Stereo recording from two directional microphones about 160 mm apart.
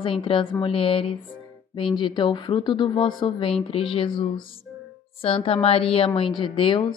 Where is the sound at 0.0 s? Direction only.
35° left (ahead or behind).